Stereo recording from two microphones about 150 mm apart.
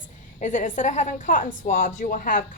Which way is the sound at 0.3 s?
55° left (ahead or behind).